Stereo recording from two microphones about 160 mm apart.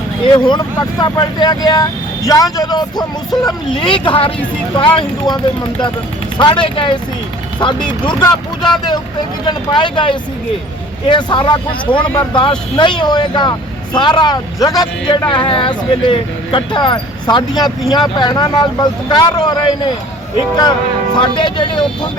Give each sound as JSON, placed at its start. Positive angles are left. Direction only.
{"t": 0.3, "sound": "speech", "side_deg": 30}
{"t": 6.4, "sound": "speech", "side_deg": 30}
{"t": 9.5, "sound": "speech", "side_deg": 30}